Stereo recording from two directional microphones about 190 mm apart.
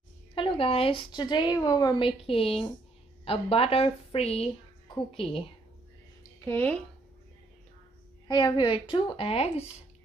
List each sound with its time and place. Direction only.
0.3 s a woman's voice: 25° left (ahead or behind)
6.4 s speech: 10° left (ahead or behind)
8.3 s a woman's voice: 25° left (ahead or behind)